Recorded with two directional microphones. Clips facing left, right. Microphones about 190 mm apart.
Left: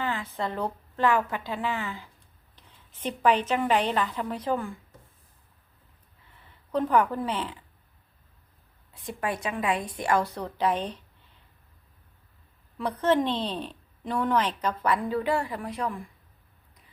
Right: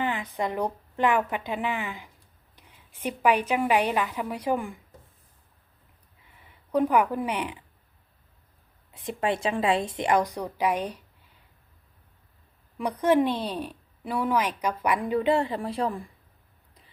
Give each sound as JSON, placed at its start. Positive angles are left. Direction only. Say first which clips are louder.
{"t": 0.0, "sound": "a woman's voice", "louder": "right 2 dB", "side_deg": -15}
{"t": 6.3, "sound": "speech", "louder": "right 3 dB", "side_deg": -10}
{"t": 8.9, "sound": "speech", "louder": "right 4 dB", "side_deg": -25}
{"t": 12.7, "sound": "a woman's voice", "louder": "right 2 dB", "side_deg": -15}